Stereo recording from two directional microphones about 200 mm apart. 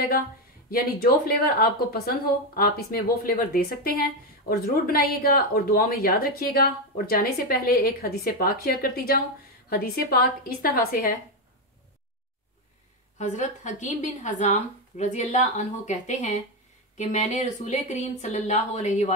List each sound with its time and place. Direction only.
0.7 s speech: 50° left (ahead or behind)
13.2 s a woman's voice: 40° left (ahead or behind)